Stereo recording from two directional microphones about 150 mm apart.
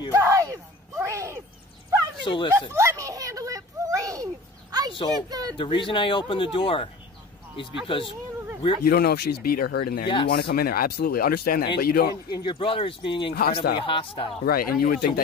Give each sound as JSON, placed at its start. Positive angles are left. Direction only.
{"t": 0.1, "sound": "a sound", "side_deg": -20}
{"t": 2.2, "sound": "speech", "side_deg": 35}
{"t": 2.7, "sound": "a sound", "side_deg": -20}
{"t": 5.3, "sound": "speech", "side_deg": -25}
{"t": 5.6, "sound": "speech", "side_deg": 35}
{"t": 8.8, "sound": "speech", "side_deg": 90}
{"t": 10.0, "sound": "speech", "side_deg": 35}
{"t": 10.3, "sound": "speech", "side_deg": 90}
{"t": 12.3, "sound": "speech", "side_deg": 30}
{"t": 13.3, "sound": "speech", "side_deg": 90}
{"t": 13.8, "sound": "speech", "side_deg": 35}
{"t": 14.4, "sound": "speech", "side_deg": 85}